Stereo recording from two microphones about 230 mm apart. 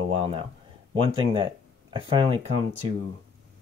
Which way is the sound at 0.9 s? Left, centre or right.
Right.